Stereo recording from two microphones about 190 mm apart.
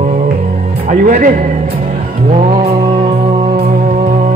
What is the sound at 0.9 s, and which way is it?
Speech, 45° right (ahead or behind).